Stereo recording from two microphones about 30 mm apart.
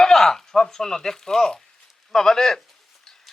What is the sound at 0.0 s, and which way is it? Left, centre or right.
Speech, centre.